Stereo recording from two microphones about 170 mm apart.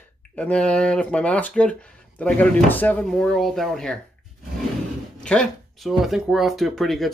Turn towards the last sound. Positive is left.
turn(degrees=0)  # may be behind; listen again after turning